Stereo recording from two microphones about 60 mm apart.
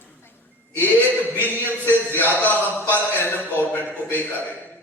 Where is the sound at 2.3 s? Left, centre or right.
Right.